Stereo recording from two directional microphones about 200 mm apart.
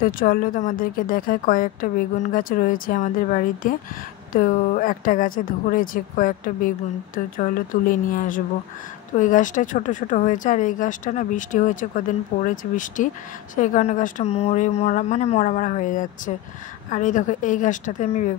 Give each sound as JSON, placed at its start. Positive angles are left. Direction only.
{"t": 0.0, "sound": "speech", "side_deg": 45}